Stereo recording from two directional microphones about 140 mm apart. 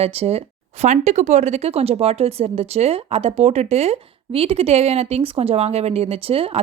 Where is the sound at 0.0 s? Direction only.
45° right (ahead or behind).